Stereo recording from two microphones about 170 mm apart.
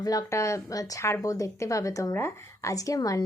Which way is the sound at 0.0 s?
20° left (ahead or behind).